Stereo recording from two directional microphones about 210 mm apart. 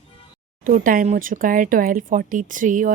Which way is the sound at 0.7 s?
40° right (ahead or behind).